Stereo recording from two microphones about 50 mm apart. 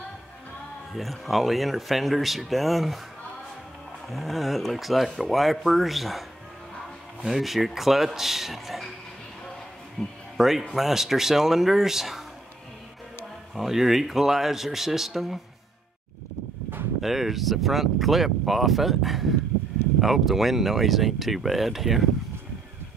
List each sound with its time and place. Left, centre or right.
0.9 s speech: centre
4.1 s speech: centre
7.2 s speech: centre
10.0 s speech: centre
10.3 s speech: centre
13.6 s speech: centre
17.0 s speech: centre